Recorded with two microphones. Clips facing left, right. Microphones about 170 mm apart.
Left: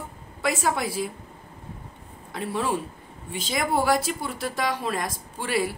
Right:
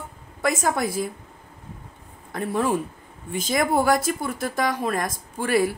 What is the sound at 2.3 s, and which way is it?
Speech, 50° right (ahead or behind).